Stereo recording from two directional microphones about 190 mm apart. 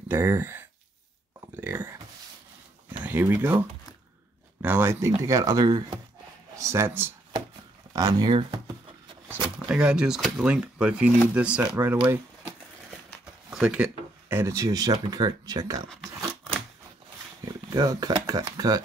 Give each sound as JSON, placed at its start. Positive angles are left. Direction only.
{"t": 0.1, "sound": "speech", "side_deg": -10}
{"t": 1.4, "sound": "a sound", "side_deg": -10}
{"t": 3.0, "sound": "speech", "side_deg": -10}
{"t": 9.3, "sound": "speech", "side_deg": -5}
{"t": 13.2, "sound": "a sound", "side_deg": -5}
{"t": 14.3, "sound": "speech", "side_deg": -15}
{"t": 17.5, "sound": "speech", "side_deg": -20}